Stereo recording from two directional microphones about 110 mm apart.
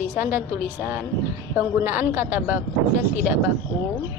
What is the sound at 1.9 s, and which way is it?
Speech, 15° right (ahead or behind).